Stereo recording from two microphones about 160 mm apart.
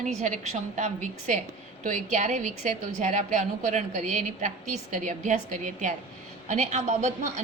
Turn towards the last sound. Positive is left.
turn(degrees=-45)  # may be behind; listen again after turning